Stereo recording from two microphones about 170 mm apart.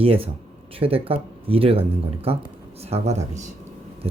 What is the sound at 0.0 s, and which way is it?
Speech, 35° right (ahead or behind).